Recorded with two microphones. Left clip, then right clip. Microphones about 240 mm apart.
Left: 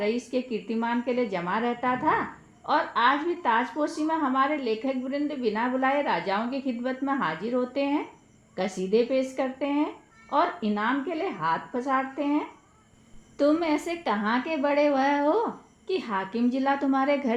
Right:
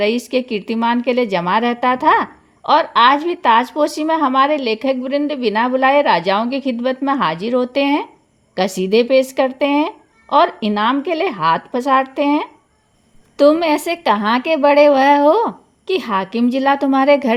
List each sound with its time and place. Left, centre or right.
0.0 s speech: right